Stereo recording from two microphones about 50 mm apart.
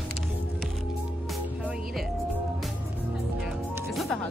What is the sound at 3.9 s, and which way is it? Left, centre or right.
Music, centre.